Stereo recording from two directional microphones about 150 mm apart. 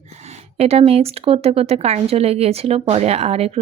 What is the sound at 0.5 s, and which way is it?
A woman's voice, 45° right (ahead or behind).